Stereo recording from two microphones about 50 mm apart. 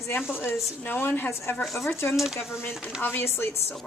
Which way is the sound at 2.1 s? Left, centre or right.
Centre.